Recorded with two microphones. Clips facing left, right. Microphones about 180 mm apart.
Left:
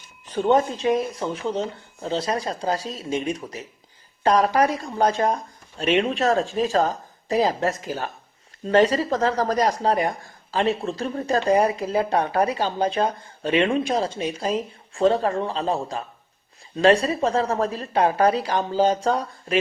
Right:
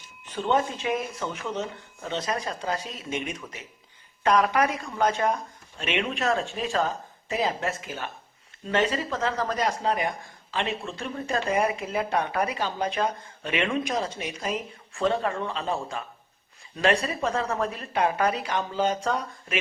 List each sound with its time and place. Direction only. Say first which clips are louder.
0.3 s speech: left 6 dB; 40° left (ahead or behind)